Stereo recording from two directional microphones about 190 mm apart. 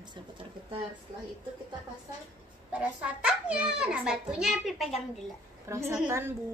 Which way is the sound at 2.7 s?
5° right (ahead or behind).